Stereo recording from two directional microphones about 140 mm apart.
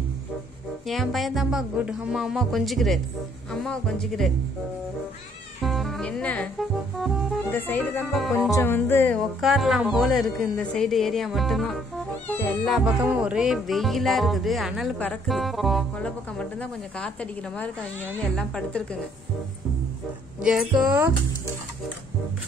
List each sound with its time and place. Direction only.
0.8 s speech: centre (ahead or behind)
5.6 s music: centre (ahead or behind)
8.1 s speech: centre (ahead or behind)
8.5 s music: 20° left (ahead or behind)
9.4 s speech: centre (ahead or behind)
12.3 s cat: 15° left (ahead or behind)
12.6 s speech: centre (ahead or behind)
18.3 s music: 5° left (ahead or behind)
20.4 s speech: 5° right (ahead or behind)